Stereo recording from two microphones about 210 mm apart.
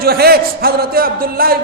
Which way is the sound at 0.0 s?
45° right (ahead or behind).